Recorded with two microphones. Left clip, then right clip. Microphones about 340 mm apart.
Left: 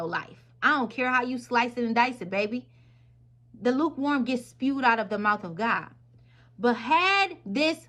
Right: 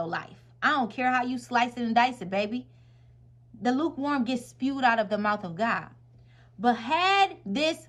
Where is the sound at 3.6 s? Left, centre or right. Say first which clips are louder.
Left 2 dB; right.